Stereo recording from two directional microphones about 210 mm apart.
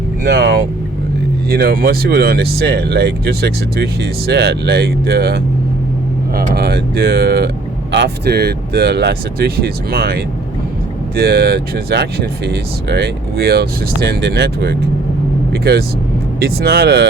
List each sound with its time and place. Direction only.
0.3 s speech: 50° right (ahead or behind)